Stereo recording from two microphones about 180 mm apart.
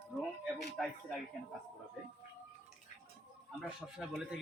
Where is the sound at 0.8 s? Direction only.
Centre (ahead or behind).